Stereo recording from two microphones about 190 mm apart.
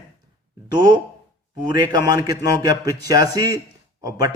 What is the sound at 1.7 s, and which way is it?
A man's voice, 20° right (ahead or behind).